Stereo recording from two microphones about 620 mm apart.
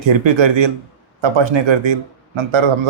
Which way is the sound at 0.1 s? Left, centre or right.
Right.